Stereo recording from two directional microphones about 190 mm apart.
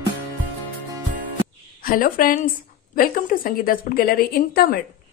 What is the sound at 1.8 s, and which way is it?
A woman's voice, 50° left (ahead or behind).